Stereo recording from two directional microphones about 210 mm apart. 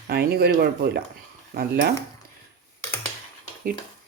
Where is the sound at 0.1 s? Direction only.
50° right (ahead or behind).